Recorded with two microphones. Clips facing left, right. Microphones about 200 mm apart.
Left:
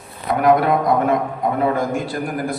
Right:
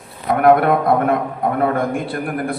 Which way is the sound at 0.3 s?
55° right (ahead or behind).